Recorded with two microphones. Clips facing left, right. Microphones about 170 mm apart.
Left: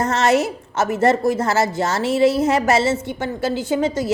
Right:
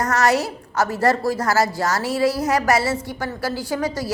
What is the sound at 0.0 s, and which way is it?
A woman's voice, 25° left (ahead or behind).